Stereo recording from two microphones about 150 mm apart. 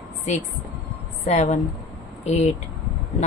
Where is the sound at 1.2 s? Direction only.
50° left (ahead or behind).